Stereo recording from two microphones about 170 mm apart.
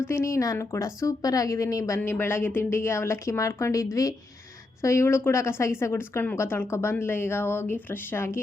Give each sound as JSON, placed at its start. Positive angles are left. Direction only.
{"t": 0.1, "sound": "a woman's voice", "side_deg": 15}